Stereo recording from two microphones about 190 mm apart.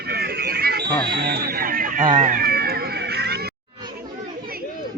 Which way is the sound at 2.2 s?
45° right (ahead or behind).